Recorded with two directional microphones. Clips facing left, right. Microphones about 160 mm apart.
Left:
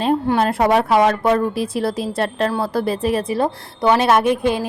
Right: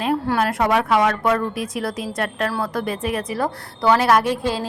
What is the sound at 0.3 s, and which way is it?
A woman's voice, 25° left (ahead or behind).